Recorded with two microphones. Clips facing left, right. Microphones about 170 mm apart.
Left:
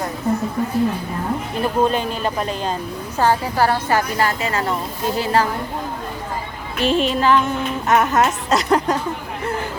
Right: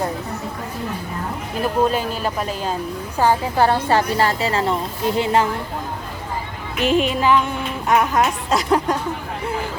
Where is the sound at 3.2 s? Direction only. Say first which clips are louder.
Right 1 dB; 20° right (ahead or behind).